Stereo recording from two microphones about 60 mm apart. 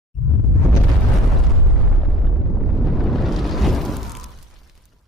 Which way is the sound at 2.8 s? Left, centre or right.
Centre.